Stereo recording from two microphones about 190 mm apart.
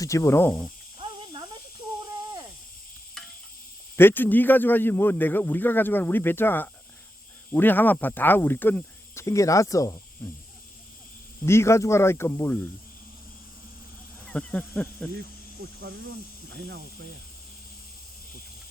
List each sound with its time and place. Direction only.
0.0 s a man's voice: 15° left (ahead or behind)
0.9 s snake: 25° right (ahead or behind)
3.2 s insect: centre (ahead or behind)
3.9 s a man's voice: 10° left (ahead or behind)
11.4 s a man's voice: 15° left (ahead or behind)
14.3 s a man's voice: 5° left (ahead or behind)
15.6 s speech: 55° right (ahead or behind)